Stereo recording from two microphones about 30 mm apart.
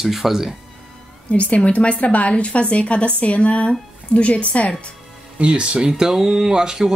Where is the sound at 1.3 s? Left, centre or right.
Left.